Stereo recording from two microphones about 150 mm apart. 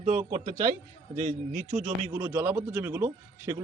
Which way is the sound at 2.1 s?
10° right (ahead or behind).